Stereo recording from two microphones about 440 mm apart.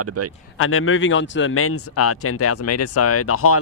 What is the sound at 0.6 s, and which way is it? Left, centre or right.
Speech, left.